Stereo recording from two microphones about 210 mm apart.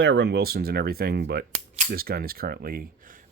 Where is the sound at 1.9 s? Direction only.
45° right (ahead or behind).